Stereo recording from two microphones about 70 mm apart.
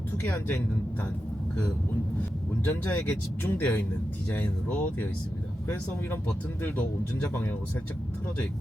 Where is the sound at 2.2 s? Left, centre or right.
Left.